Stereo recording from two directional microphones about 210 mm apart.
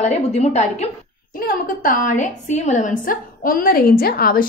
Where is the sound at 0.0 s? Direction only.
30° left (ahead or behind).